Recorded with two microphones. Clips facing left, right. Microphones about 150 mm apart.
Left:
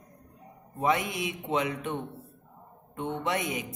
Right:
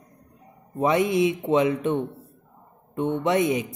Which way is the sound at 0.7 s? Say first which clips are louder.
Right 7 dB; 20° right (ahead or behind).